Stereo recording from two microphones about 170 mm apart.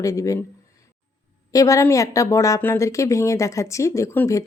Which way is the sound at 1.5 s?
20° left (ahead or behind).